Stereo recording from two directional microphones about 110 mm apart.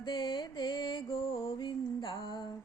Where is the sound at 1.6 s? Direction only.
50° left (ahead or behind).